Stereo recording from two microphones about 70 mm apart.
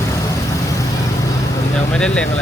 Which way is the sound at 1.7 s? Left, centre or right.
Centre.